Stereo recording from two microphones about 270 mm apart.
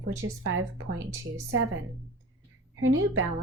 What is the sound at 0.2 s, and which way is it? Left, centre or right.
Speech, right.